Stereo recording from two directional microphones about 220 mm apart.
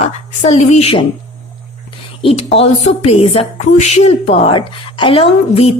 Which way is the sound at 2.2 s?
30° left (ahead or behind).